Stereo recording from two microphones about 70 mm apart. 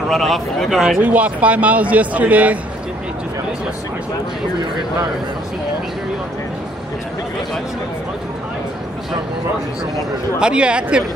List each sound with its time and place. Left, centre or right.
0.1 s speech: centre
1.0 s a man's voice: right
10.4 s speech: centre